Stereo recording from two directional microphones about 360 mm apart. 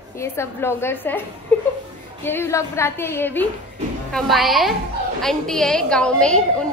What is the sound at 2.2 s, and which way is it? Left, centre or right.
A woman's voice, centre.